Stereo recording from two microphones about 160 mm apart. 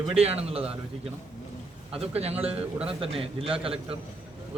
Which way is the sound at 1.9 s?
40° right (ahead or behind).